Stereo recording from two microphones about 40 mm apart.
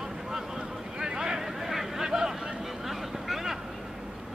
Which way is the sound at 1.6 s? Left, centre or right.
Centre.